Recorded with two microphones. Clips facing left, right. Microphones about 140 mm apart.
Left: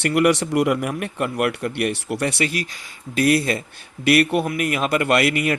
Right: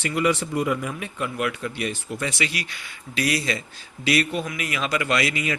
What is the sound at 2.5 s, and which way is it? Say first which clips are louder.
Speech: left 6 dB; 45° left (ahead or behind).